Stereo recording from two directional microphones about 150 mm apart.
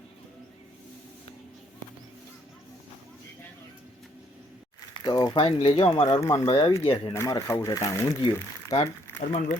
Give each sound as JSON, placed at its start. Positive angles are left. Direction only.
{"t": 5.0, "sound": "speech", "side_deg": 30}
{"t": 6.1, "sound": "speech", "side_deg": 20}
{"t": 6.5, "sound": "speech", "side_deg": 35}
{"t": 7.1, "sound": "speech", "side_deg": 20}
{"t": 9.2, "sound": "a man's voice", "side_deg": 60}